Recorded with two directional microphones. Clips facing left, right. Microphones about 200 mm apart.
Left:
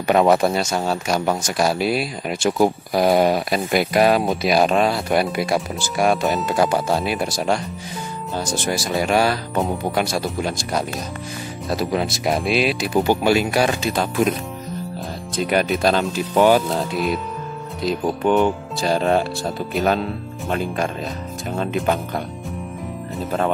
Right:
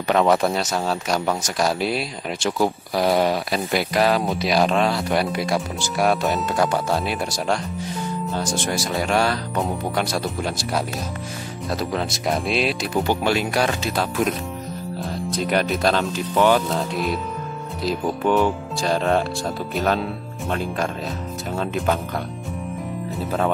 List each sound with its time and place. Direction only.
0.0 s speech: 10° left (ahead or behind)
2.5 s speech: 15° left (ahead or behind)
16.4 s speech: 15° left (ahead or behind)
16.9 s speech: centre (ahead or behind)
23.1 s speech: centre (ahead or behind)